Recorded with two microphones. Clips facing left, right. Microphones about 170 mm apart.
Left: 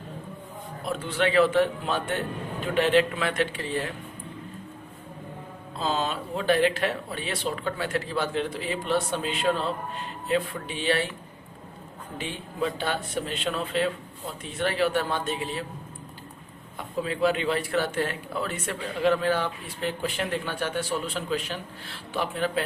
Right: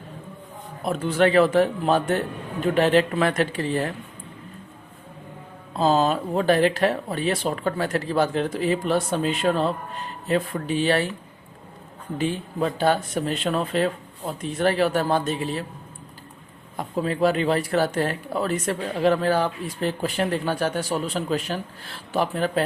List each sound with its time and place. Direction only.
0.9 s speech: 45° right (ahead or behind)
5.8 s speech: 40° right (ahead or behind)
12.1 s speech: 40° right (ahead or behind)
16.7 s speech: 40° right (ahead or behind)